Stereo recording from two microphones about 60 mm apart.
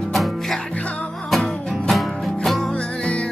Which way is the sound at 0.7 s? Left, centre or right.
Left.